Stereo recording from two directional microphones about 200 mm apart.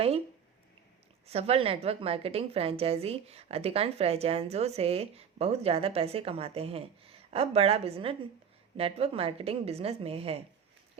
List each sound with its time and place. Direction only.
1.3 s a woman's voice: 30° right (ahead or behind)